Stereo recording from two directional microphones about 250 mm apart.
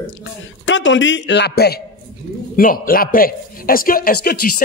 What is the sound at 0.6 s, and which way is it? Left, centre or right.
A man's voice, left.